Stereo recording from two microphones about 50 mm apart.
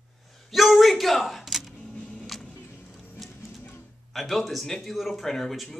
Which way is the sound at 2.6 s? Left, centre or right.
Left.